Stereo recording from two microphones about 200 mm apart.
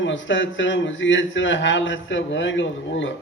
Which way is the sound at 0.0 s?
70° left (ahead or behind).